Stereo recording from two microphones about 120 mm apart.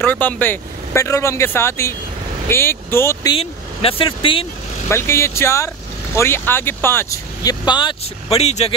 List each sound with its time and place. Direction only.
0.0 s speech: 15° left (ahead or behind)
3.3 s speech: 50° left (ahead or behind)
4.8 s speech: 20° left (ahead or behind)
7.4 s speech: 40° left (ahead or behind)
8.3 s speech: 60° left (ahead or behind)